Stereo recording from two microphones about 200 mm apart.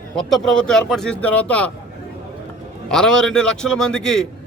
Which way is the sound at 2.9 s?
5° left (ahead or behind).